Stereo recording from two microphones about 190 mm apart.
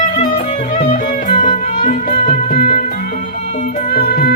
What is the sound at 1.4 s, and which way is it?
Music, 45° left (ahead or behind).